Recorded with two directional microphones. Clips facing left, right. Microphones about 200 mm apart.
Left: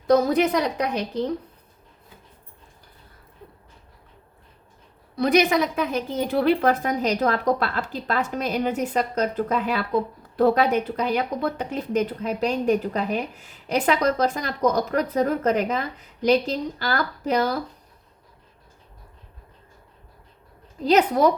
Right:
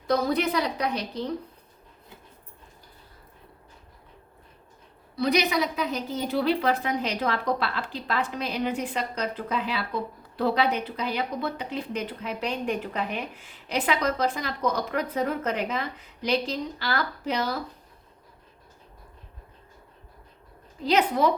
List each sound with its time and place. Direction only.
0.1 s a woman's voice: 50° left (ahead or behind)
5.1 s a woman's voice: 50° left (ahead or behind)
20.9 s a woman's voice: 45° left (ahead or behind)